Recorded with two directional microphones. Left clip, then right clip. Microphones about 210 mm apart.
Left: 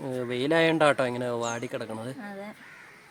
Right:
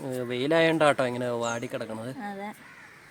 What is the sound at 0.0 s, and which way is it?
A woman's voice, centre (ahead or behind).